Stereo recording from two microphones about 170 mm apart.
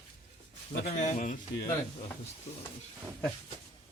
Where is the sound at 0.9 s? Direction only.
45° left (ahead or behind).